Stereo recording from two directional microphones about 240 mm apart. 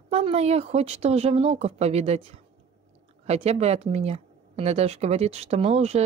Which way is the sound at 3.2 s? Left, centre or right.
Right.